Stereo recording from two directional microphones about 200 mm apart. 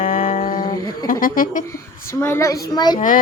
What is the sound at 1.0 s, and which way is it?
Speech, 45° left (ahead or behind).